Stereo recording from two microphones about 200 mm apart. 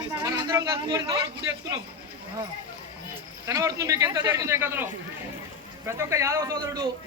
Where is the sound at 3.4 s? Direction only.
15° right (ahead or behind).